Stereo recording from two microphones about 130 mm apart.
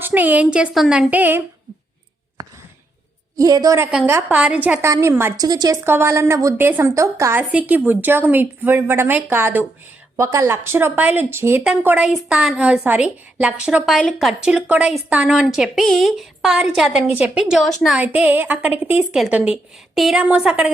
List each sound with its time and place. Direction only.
0.0 s a woman's voice: 15° right (ahead or behind)
2.4 s sigh: 25° right (ahead or behind)
3.3 s speech: 30° right (ahead or behind)
4.0 s a woman's voice: 15° right (ahead or behind)
5.5 s speech: 30° right (ahead or behind)
5.8 s a woman's voice: 20° right (ahead or behind); by 18.0 s centre (ahead or behind)
18.0 s a woman's voice: 10° right (ahead or behind)